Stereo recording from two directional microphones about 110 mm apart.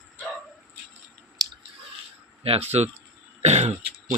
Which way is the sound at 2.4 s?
65° right (ahead or behind).